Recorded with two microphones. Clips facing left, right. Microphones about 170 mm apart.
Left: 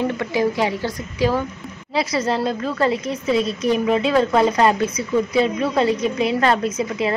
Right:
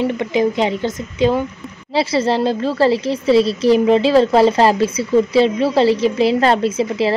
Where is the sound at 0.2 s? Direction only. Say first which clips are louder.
Right 3 dB; 20° right (ahead or behind).